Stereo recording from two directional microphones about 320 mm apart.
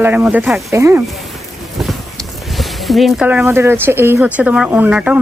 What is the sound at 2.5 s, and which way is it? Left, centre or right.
Speech, centre.